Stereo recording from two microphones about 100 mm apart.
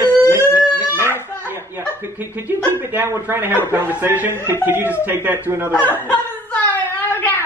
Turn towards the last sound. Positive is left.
turn(degrees=20)  # may be behind; listen again after turning